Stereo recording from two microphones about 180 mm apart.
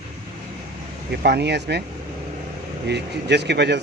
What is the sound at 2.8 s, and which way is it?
Speech, 70° right (ahead or behind).